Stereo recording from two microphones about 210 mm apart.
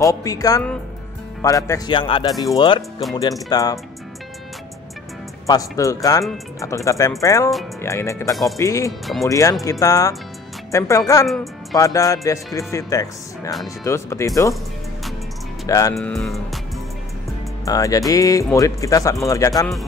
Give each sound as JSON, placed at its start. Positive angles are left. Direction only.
{"t": 0.0, "sound": "speech", "side_deg": 15}
{"t": 5.5, "sound": "speech", "side_deg": 15}
{"t": 15.6, "sound": "speech", "side_deg": 15}
{"t": 15.9, "sound": "speech", "side_deg": 0}
{"t": 17.6, "sound": "speech", "side_deg": 15}